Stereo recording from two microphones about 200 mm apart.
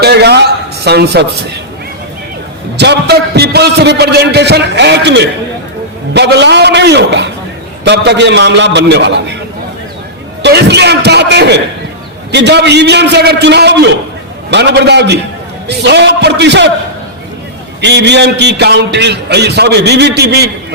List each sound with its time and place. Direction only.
0.0 s a sound: 55° right (ahead or behind)
2.7 s a man's voice: 55° right (ahead or behind)
10.4 s a man's voice: 55° right (ahead or behind)
17.7 s a man's voice: 60° right (ahead or behind)